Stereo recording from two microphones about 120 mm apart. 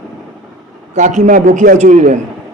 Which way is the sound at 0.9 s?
90° right.